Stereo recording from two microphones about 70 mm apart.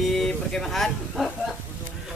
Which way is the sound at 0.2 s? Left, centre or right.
Centre.